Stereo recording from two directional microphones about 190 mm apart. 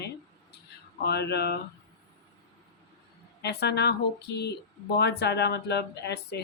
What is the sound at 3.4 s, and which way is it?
A woman's voice, 60° left (ahead or behind).